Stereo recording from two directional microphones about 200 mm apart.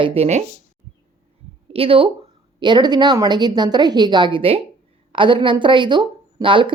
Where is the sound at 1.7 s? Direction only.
30° right (ahead or behind).